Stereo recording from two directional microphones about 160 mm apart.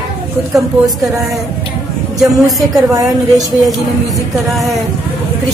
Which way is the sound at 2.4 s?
Centre (ahead or behind).